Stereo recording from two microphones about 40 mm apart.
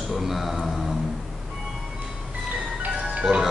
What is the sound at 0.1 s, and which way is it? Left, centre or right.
Speech, centre.